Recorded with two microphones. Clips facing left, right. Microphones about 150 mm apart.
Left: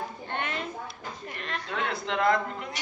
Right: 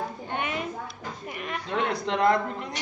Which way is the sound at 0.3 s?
10° right (ahead or behind).